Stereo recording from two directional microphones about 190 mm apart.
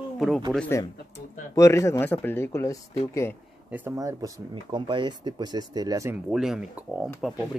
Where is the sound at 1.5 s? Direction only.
15° left (ahead or behind).